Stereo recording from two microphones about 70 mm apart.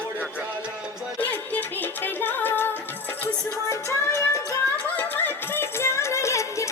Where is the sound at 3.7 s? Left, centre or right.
Left.